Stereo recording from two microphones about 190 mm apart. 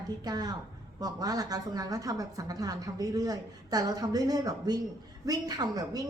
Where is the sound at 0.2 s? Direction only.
20° right (ahead or behind).